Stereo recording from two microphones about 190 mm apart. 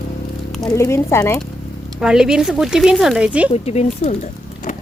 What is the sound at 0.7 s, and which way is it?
Speech, 15° left (ahead or behind).